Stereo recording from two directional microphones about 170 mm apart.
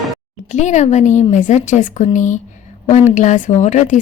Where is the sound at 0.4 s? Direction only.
45° left (ahead or behind).